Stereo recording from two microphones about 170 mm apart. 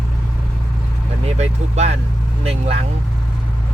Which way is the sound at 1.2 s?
40° right (ahead or behind).